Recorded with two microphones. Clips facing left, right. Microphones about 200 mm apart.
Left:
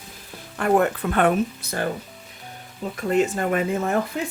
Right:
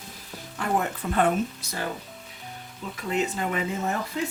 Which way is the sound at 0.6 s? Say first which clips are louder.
Left 7 dB; 60° left (ahead or behind).